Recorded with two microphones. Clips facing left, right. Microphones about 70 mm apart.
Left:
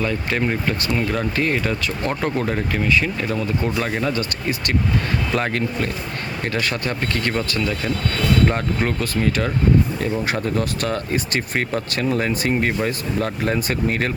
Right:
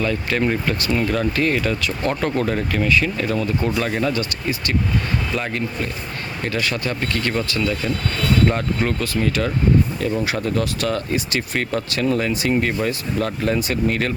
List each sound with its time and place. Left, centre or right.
0.0 s speech: left
4.2 s speech: left
6.4 s speech: left
8.4 s speech: left